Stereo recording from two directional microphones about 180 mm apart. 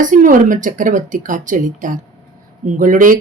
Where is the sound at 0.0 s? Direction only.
45° right (ahead or behind).